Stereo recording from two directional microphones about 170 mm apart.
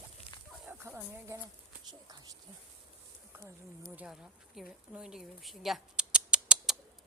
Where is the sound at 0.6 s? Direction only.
10° right (ahead or behind).